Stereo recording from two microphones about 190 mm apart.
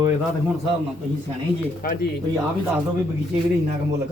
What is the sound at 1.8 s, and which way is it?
Speech, 50° left (ahead or behind).